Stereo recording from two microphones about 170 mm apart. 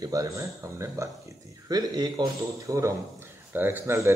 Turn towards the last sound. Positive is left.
turn(degrees=-15)  # may be behind; listen again after turning